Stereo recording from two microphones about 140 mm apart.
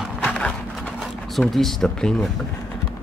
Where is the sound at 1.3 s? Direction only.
Centre (ahead or behind).